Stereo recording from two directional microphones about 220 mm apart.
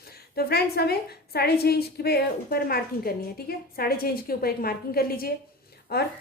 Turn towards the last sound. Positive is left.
turn(degrees=45)  # may be behind; listen again after turning